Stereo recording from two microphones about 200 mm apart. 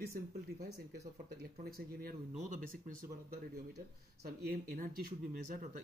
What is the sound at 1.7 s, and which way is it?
Speech, 45° right (ahead or behind).